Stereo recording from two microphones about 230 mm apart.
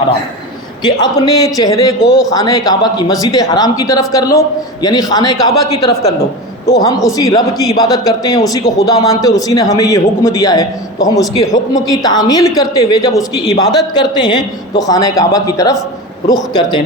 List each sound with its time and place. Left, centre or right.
0.8 s a man's voice: centre